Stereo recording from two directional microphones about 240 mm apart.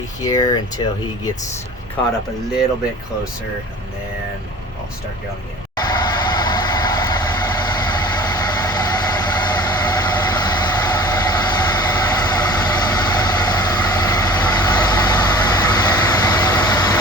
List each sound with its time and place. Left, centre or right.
0.2 s speech: centre
5.7 s vehicle: centre